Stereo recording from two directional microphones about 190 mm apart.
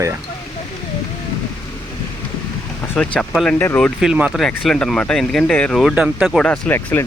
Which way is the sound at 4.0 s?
5° right (ahead or behind).